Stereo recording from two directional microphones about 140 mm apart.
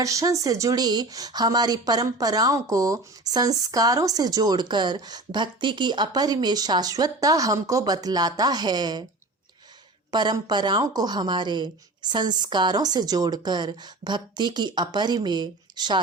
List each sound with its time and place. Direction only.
0.0 s speech: 25° right (ahead or behind)
10.1 s a woman's voice: 30° right (ahead or behind)